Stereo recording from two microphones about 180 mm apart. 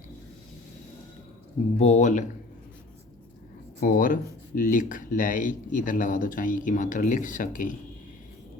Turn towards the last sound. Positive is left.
turn(degrees=45)  # may be behind; listen again after turning